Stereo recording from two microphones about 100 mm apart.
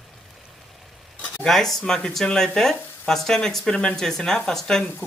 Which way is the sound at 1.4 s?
5° left (ahead or behind).